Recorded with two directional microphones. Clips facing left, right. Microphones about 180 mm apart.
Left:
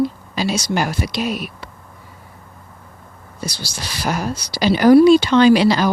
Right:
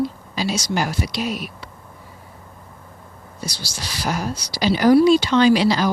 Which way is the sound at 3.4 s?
55° left (ahead or behind).